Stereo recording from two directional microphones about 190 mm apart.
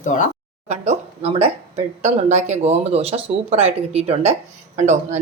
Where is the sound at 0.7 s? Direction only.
35° right (ahead or behind).